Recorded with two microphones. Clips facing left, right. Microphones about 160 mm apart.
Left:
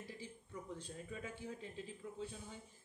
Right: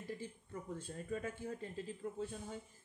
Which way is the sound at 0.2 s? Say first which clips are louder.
Right 3 dB; 50° right (ahead or behind).